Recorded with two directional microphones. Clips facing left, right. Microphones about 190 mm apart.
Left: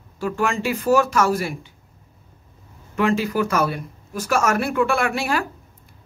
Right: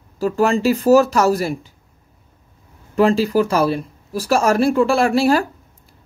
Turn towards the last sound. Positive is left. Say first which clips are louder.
# right 8 dB
turn(degrees=-35)  # may be behind; listen again after turning